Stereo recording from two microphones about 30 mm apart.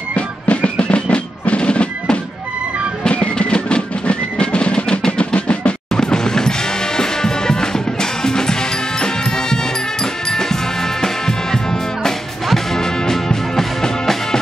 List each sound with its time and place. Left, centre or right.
0.1 s music: left
3.2 s music: left
5.9 s music: left
10.3 s music: centre